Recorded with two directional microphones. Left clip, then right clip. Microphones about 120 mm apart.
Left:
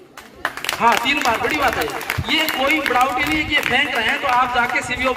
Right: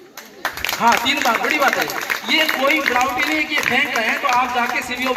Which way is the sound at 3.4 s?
30° right (ahead or behind).